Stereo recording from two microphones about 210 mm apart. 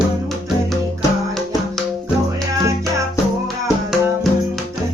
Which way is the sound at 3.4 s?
Centre (ahead or behind).